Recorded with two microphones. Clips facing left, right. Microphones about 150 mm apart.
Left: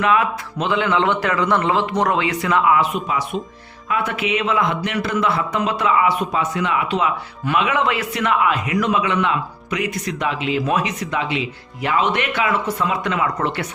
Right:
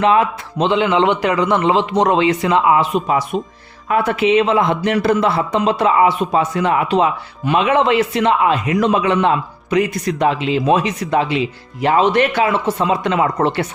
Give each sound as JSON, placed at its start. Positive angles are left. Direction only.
{"t": 0.0, "sound": "a man's voice", "side_deg": -30}